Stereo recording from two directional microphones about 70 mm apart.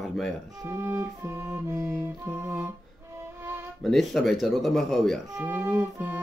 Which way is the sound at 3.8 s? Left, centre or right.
Centre.